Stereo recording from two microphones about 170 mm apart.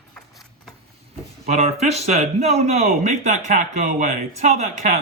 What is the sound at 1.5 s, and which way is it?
A man's voice, 40° right (ahead or behind).